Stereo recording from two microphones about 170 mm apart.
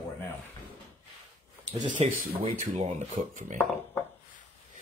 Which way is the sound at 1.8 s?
45° right (ahead or behind).